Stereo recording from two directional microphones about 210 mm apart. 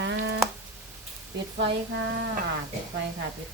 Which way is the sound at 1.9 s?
60° right (ahead or behind).